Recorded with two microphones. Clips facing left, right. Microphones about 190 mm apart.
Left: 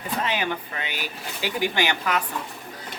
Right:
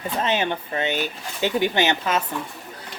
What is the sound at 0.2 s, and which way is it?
Speech, 25° right (ahead or behind).